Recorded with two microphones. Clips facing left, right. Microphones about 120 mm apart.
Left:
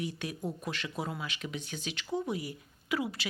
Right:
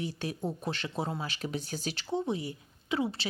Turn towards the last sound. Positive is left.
turn(degrees=-30)  # may be behind; listen again after turning